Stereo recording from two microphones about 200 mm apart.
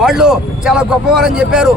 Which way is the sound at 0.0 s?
5° right (ahead or behind).